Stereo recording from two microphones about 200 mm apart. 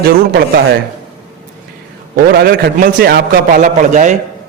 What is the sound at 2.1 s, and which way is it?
A man's voice, 50° right (ahead or behind).